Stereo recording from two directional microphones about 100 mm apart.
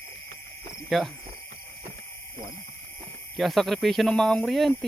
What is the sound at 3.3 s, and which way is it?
Speech, centre (ahead or behind).